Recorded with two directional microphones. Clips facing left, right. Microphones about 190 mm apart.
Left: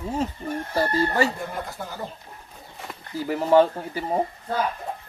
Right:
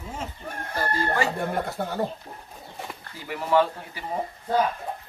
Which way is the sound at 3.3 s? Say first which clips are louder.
Left 5 dB; 40° left (ahead or behind).